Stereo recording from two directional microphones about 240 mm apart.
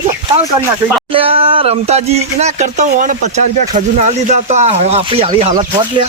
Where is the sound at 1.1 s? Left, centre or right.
Right.